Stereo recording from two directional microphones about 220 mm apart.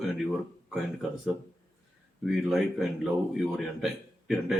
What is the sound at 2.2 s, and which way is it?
Speech, centre (ahead or behind).